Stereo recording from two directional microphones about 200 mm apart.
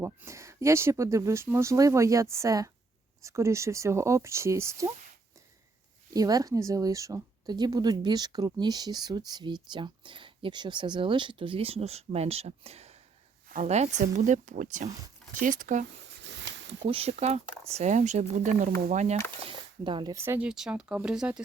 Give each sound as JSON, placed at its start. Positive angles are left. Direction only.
{"t": 0.0, "sound": "speech", "side_deg": -15}
{"t": 6.1, "sound": "speech", "side_deg": -20}
{"t": 16.2, "sound": "a sound", "side_deg": -60}
{"t": 16.8, "sound": "speech", "side_deg": -30}
{"t": 19.5, "sound": "speech", "side_deg": -25}